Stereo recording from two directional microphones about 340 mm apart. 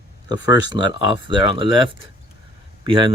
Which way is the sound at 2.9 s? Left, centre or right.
Centre.